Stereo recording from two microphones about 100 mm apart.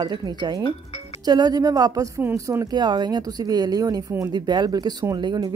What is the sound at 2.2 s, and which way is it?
Speech, 25° right (ahead or behind).